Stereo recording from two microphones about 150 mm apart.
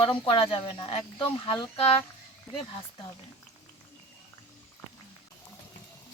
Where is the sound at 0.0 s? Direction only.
35° left (ahead or behind).